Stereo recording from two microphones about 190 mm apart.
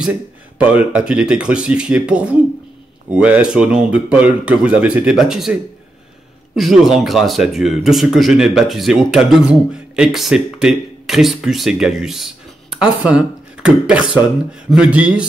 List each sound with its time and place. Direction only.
0.0 s speech: 5° right (ahead or behind)